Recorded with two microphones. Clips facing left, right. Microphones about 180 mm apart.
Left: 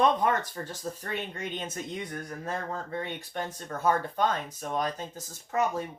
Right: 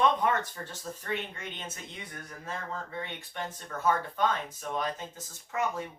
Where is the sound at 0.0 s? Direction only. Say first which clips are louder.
Left 2 dB; 35° left (ahead or behind).